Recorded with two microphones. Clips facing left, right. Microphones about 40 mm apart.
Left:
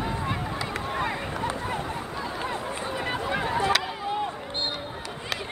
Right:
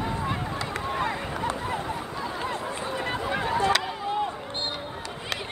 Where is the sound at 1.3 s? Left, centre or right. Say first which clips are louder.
Even; centre.